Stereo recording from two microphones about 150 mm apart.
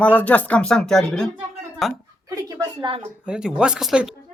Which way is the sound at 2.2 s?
25° right (ahead or behind).